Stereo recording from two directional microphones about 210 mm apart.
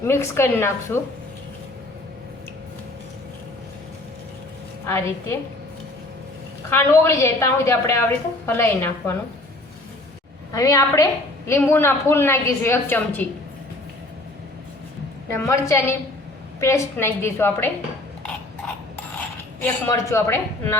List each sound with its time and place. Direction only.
0.0 s a woman's voice: 10° left (ahead or behind)
4.9 s a woman's voice: 15° left (ahead or behind)
6.7 s a woman's voice: 10° left (ahead or behind)
10.5 s a woman's voice: 15° left (ahead or behind)
15.4 s a woman's voice: 15° left (ahead or behind)
19.6 s a woman's voice: 15° left (ahead or behind)